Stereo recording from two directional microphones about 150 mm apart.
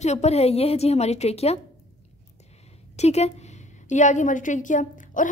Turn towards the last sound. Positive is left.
turn(degrees=60)  # may be behind; listen again after turning